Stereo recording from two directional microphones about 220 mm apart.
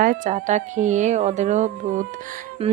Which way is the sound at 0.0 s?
35° right (ahead or behind).